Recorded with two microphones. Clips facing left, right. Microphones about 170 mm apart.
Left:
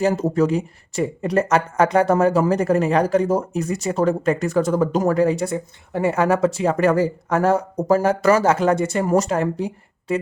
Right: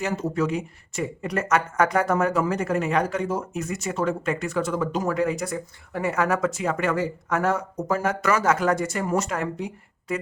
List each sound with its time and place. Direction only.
0.0 s speech: 35° left (ahead or behind)